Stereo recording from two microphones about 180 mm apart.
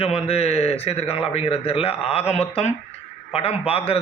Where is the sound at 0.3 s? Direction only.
35° left (ahead or behind).